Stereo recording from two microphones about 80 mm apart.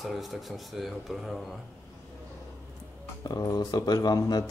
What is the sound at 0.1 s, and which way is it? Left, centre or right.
Speech, centre.